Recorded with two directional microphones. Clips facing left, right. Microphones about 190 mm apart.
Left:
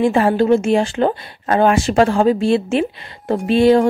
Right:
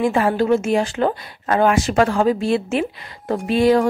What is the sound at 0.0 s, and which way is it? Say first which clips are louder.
Speech: left 3 dB; 30° left (ahead or behind).